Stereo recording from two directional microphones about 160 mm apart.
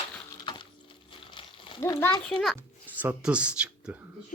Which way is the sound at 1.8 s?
15° left (ahead or behind).